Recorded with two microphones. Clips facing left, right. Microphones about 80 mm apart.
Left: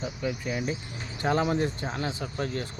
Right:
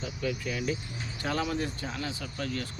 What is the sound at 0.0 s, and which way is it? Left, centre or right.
Speech, left.